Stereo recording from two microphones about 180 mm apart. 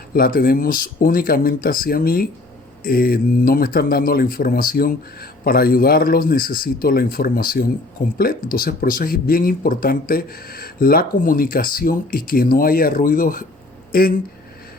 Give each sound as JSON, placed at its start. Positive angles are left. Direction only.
{"t": 0.1, "sound": "speech", "side_deg": 55}